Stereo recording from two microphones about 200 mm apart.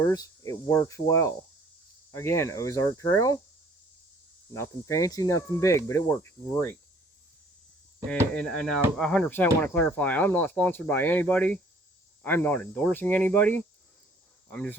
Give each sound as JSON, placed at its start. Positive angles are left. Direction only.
{"t": 0.0, "sound": "speech", "side_deg": 20}
{"t": 4.5, "sound": "speech", "side_deg": 15}
{"t": 8.4, "sound": "speech", "side_deg": 5}